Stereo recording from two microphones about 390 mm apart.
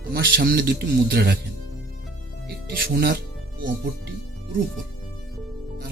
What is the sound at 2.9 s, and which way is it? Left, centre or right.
Speech, right.